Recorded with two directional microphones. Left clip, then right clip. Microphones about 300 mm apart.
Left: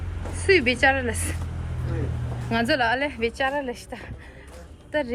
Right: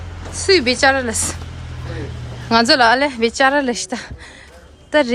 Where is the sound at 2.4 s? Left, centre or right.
Centre.